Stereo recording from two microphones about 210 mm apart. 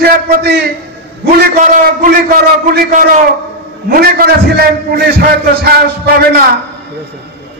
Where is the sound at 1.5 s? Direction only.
40° right (ahead or behind).